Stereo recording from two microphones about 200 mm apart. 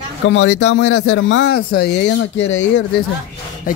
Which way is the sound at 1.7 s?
55° left (ahead or behind).